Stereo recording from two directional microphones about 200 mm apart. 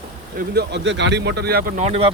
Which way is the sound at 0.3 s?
55° right (ahead or behind).